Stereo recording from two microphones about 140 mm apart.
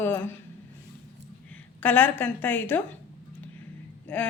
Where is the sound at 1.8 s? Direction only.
10° left (ahead or behind).